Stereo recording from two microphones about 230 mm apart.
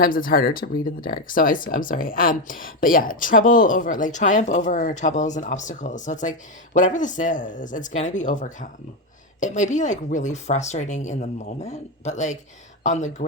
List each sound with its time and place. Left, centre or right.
0.0 s speech: left